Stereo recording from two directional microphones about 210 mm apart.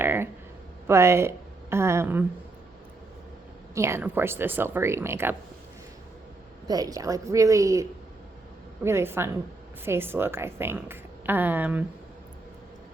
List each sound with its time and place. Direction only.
0.0 s a sound: 10° right (ahead or behind)
0.9 s a woman's voice: 10° right (ahead or behind)
3.8 s speech: 10° right (ahead or behind)
6.7 s speech: 15° right (ahead or behind)